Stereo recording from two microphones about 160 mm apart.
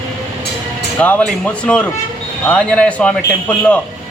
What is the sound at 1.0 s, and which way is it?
A man's voice, 10° left (ahead or behind).